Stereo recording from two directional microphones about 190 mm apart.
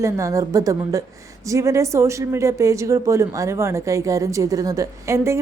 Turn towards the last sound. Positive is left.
turn(degrees=-15)  # may be behind; listen again after turning